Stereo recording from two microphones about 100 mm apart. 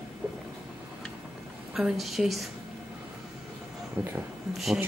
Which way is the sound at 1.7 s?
Centre (ahead or behind).